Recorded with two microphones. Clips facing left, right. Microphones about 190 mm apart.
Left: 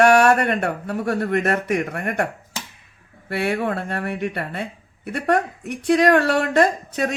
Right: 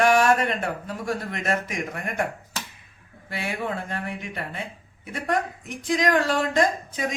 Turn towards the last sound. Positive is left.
turn(degrees=65)  # may be behind; listen again after turning